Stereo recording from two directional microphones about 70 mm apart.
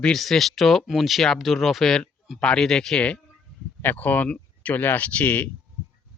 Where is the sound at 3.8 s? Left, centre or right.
Left.